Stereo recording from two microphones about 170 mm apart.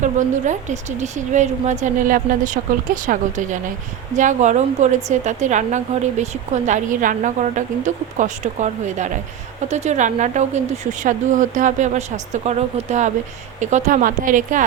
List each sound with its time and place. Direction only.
0.0 s a woman's voice: 45° right (ahead or behind)